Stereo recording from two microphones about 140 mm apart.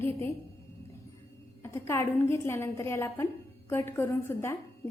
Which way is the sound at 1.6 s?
20° left (ahead or behind).